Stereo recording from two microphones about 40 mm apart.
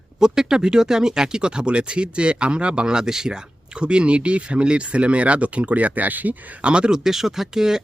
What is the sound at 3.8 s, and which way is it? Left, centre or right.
Speech, right.